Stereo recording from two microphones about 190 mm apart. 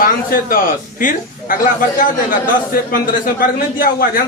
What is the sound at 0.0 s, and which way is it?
A man's voice, 50° left (ahead or behind).